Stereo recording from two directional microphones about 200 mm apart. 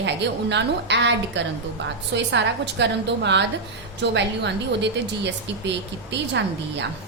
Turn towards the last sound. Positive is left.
turn(degrees=-60)  # may be behind; listen again after turning